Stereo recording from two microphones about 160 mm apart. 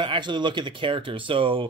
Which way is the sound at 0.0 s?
30° right (ahead or behind).